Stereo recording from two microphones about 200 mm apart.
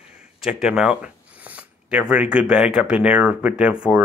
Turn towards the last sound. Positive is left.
turn(degrees=-5)  # may be behind; listen again after turning